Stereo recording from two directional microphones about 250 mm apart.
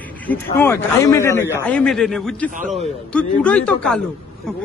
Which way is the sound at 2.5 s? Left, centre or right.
Right.